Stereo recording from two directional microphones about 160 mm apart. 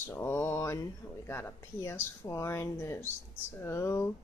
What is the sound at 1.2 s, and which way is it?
Speech, 15° left (ahead or behind).